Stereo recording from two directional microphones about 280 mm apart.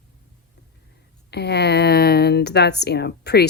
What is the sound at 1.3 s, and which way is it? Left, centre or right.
Speech, left.